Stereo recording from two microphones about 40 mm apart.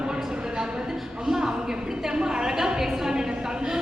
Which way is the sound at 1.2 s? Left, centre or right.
Centre.